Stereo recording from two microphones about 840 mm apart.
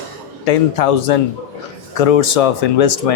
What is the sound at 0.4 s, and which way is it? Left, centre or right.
A man's voice, left.